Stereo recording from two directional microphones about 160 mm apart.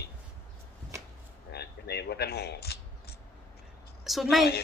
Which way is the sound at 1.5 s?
90° left.